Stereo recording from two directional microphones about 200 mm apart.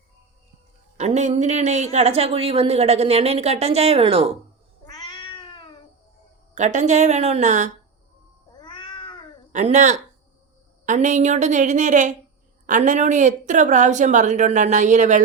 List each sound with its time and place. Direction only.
0.9 s speech: 35° right (ahead or behind)
4.9 s cat: 20° left (ahead or behind)
6.5 s speech: 35° right (ahead or behind)
8.5 s cat: 20° left (ahead or behind)
9.5 s speech: 35° right (ahead or behind)